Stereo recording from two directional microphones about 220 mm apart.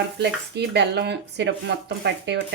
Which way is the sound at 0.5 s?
50° right (ahead or behind).